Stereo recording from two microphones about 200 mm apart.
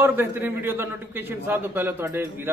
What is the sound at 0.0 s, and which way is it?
A man's voice, 10° right (ahead or behind).